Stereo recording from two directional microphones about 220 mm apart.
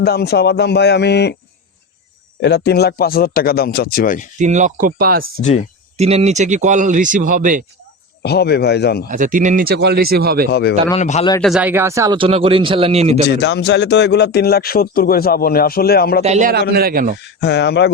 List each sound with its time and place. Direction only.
0.0 s a man's voice: 45° left (ahead or behind)
2.4 s a man's voice: 50° left (ahead or behind)
4.4 s a man's voice: 35° right (ahead or behind)
5.4 s a man's voice: 30° left (ahead or behind)
6.0 s a man's voice: 30° right (ahead or behind)
8.2 s a man's voice: 45° left (ahead or behind)
9.0 s speech: 35° right (ahead or behind)
10.5 s a man's voice: 50° left (ahead or behind)
10.9 s a man's voice: 30° left (ahead or behind)
11.3 s speech: centre (ahead or behind); by 13.2 s 30° right (ahead or behind)
13.2 s a man's voice: 50° left (ahead or behind)
16.2 s speech: 30° right (ahead or behind)
16.5 s speech: 45° right (ahead or behind)
17.2 s a man's voice: 50° left (ahead or behind)